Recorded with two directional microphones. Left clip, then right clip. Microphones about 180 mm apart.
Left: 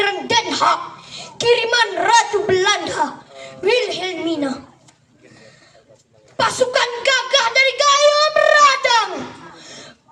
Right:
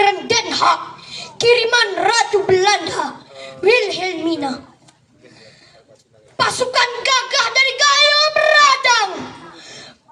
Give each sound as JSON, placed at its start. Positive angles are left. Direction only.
{"t": 0.0, "sound": "a child's voice", "side_deg": 20}
{"t": 6.3, "sound": "a woman's voice", "side_deg": 20}
{"t": 9.6, "sound": "throat clearing", "side_deg": 20}